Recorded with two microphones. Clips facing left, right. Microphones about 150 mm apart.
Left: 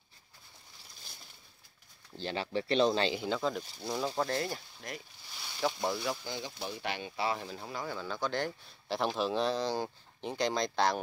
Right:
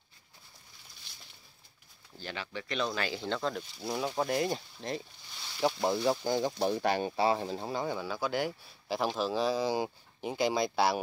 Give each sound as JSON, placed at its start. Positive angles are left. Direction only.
{"t": 2.2, "sound": "speech", "side_deg": 30}
{"t": 3.2, "sound": "speech", "side_deg": 5}
{"t": 6.2, "sound": "speech", "side_deg": -45}
{"t": 8.0, "sound": "speech", "side_deg": -10}